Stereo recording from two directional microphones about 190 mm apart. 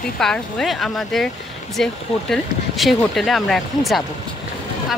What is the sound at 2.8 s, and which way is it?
Speech, centre (ahead or behind).